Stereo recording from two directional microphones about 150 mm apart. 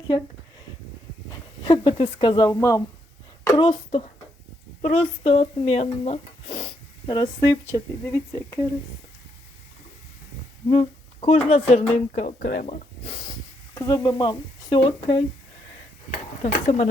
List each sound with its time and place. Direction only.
1.3 s a sound: 30° left (ahead or behind)
2.1 s speech: 30° left (ahead or behind)
3.4 s a woman's voice: 30° left (ahead or behind)
4.8 s speech: 45° left (ahead or behind)
7.1 s speech: 30° left (ahead or behind)
10.7 s speech: 45° left (ahead or behind)
11.7 s speech: 55° left (ahead or behind); by 12.6 s 70° left (ahead or behind)
13.7 s speech: 20° left (ahead or behind)
16.4 s speech: 50° left (ahead or behind)